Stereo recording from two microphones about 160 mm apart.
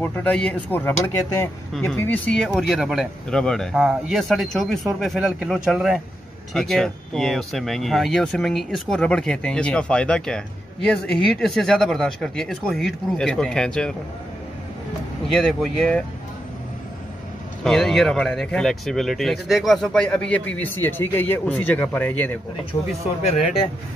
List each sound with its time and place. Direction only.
0.0 s speech: 10° left (ahead or behind)
15.6 s speech: 5° left (ahead or behind)
17.6 s speech: 5° left (ahead or behind)
22.7 s speech: 20° left (ahead or behind)